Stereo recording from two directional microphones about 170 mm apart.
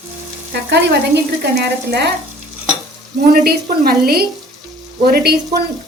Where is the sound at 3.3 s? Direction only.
65° right (ahead or behind).